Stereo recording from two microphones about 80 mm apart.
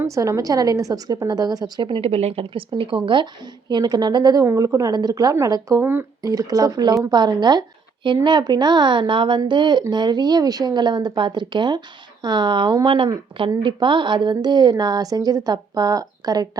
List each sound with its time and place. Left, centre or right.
0.1 s a woman's voice: right
2.5 s speech: right
3.7 s a woman's voice: right
4.4 s a woman's voice: right
5.8 s speech: right
6.2 s a woman's voice: right
8.0 s speech: right
9.5 s a woman's voice: right